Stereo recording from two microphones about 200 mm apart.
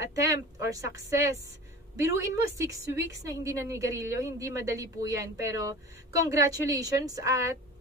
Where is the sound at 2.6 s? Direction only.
15° right (ahead or behind).